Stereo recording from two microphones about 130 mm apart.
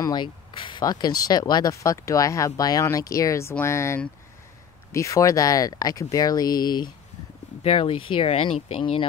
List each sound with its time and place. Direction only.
0.0 s speech: 35° left (ahead or behind)
7.6 s speech: 45° left (ahead or behind)